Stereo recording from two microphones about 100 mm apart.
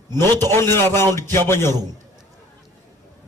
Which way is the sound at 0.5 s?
25° left (ahead or behind).